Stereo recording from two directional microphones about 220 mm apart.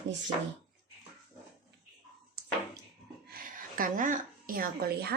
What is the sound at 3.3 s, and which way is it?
A woman's voice, 40° right (ahead or behind).